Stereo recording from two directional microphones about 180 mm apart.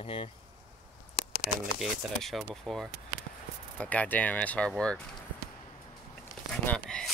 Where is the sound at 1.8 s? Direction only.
Centre (ahead or behind).